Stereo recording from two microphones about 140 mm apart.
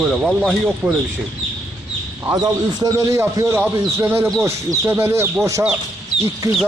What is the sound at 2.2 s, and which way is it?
A man's voice, 25° right (ahead or behind).